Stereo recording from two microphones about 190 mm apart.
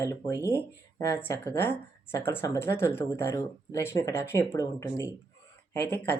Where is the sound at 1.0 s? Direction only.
15° left (ahead or behind).